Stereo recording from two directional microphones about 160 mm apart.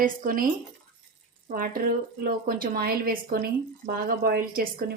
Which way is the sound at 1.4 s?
60° right (ahead or behind).